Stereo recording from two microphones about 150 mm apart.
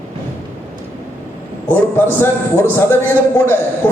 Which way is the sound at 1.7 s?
15° left (ahead or behind).